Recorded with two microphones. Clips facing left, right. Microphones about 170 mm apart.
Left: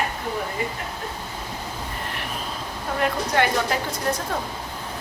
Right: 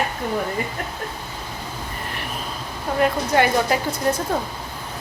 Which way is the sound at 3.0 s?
5° right (ahead or behind).